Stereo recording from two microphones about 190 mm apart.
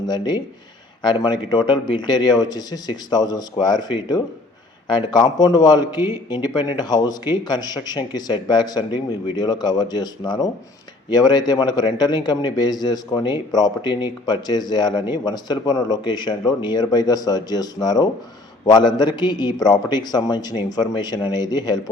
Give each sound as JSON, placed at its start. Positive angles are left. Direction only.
{"t": 1.0, "sound": "a man's voice", "side_deg": 25}